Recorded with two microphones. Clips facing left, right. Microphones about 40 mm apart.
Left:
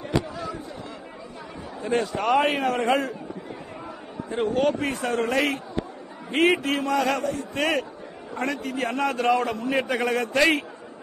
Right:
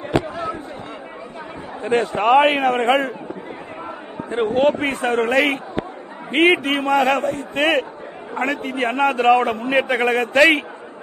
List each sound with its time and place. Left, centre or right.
0.1 s fireworks: right
1.8 s a man's voice: right
4.2 s a man's voice: right